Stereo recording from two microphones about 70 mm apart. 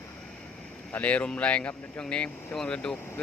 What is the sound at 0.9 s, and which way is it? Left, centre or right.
Speech, centre.